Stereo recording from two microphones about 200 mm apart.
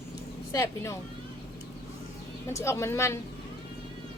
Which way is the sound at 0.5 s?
15° left (ahead or behind).